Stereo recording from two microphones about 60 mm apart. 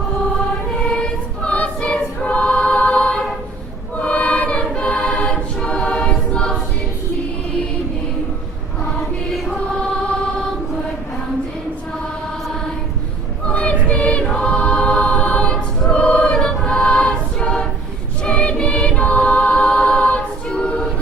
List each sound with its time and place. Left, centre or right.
0.9 s choir: centre
9.0 s music: centre
13.5 s choir: left